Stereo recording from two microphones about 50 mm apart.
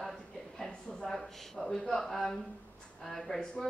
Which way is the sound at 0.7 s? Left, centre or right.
Centre.